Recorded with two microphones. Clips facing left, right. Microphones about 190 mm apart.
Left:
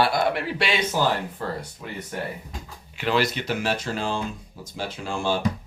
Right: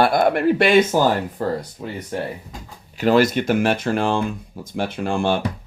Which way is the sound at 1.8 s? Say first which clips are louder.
Right 5 dB; 35° right (ahead or behind).